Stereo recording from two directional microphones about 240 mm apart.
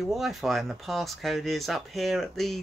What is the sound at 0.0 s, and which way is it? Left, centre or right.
Speech, centre.